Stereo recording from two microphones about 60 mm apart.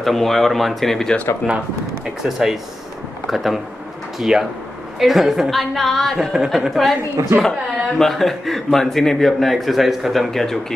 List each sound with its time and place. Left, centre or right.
0.0 s a man's voice: centre
2.2 s a man's voice: centre
6.1 s a woman's voice: centre
6.5 s a man's voice: centre
7.2 s speech: right
8.0 s a man's voice: centre